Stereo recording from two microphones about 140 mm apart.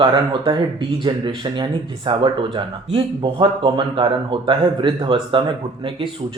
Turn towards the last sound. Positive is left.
turn(degrees=-35)  # may be behind; listen again after turning